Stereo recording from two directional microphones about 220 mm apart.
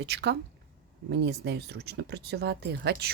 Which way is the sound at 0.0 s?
50° right (ahead or behind).